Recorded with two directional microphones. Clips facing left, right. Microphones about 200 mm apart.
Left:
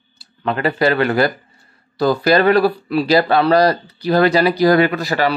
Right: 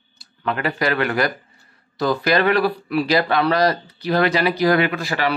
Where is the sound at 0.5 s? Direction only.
30° left (ahead or behind).